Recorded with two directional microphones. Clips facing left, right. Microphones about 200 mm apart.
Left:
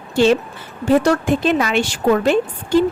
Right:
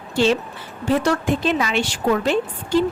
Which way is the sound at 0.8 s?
45° left (ahead or behind).